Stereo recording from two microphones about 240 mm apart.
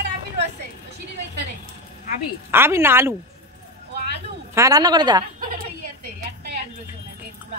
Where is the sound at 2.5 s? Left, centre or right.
Centre.